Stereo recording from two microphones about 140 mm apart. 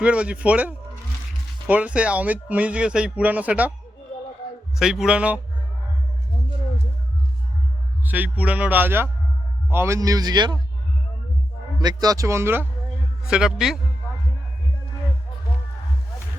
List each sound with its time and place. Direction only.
0.0 s speech: 10° right (ahead or behind)
4.8 s speech: 5° right (ahead or behind)
8.0 s a man's voice: 10° right (ahead or behind); by 10.6 s 30° right (ahead or behind)
11.8 s a man's voice: 30° right (ahead or behind)
13.2 s a man's voice: 5° right (ahead or behind)